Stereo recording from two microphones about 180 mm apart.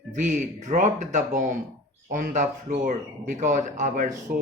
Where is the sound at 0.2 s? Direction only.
45° right (ahead or behind).